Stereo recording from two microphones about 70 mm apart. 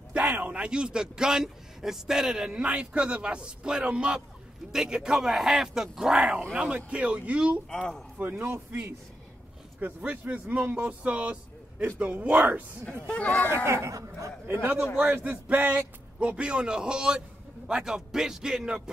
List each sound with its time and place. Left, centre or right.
0.4 s a man's voice: centre
7.7 s speech: centre
8.2 s speech: right
9.8 s speech: right
13.0 s speech: left
13.7 s speech: right
14.5 s speech: right
15.4 s a man's voice: centre